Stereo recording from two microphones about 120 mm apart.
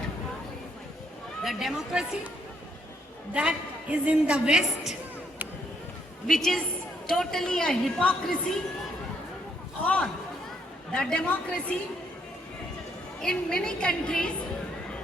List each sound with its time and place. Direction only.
1.5 s a woman's voice: 5° right (ahead or behind)
3.3 s a woman's voice: 10° right (ahead or behind)
6.2 s a woman's voice: centre (ahead or behind)
9.8 s a woman's voice: 10° left (ahead or behind)
13.2 s a woman's voice: 5° left (ahead or behind)